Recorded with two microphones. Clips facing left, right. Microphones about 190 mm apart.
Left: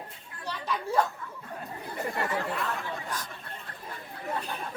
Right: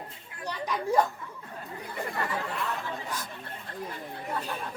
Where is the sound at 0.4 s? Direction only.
15° right (ahead or behind).